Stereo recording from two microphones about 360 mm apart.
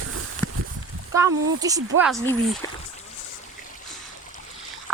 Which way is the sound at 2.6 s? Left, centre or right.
Centre.